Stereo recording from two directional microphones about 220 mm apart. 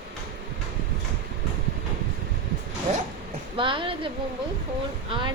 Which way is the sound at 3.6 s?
25° right (ahead or behind).